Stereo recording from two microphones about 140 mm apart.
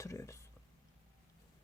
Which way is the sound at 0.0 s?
20° left (ahead or behind).